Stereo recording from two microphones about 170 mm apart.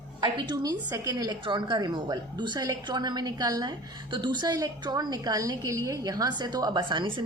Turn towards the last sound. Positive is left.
turn(degrees=-25)  # may be behind; listen again after turning